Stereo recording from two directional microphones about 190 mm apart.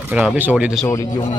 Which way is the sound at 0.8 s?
15° left (ahead or behind).